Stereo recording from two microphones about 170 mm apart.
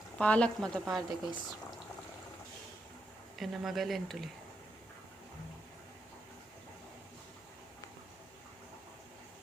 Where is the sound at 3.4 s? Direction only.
Centre (ahead or behind).